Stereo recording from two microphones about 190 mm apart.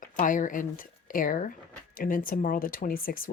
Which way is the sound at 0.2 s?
45° left (ahead or behind).